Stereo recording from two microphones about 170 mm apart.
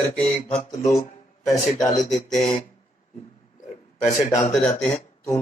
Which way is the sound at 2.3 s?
5° left (ahead or behind).